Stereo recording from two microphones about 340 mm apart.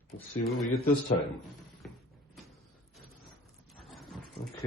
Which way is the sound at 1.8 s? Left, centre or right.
Centre.